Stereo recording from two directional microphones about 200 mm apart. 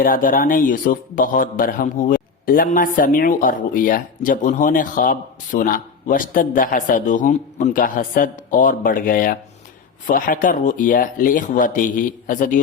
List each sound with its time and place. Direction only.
0.0 s speech: 45° left (ahead or behind)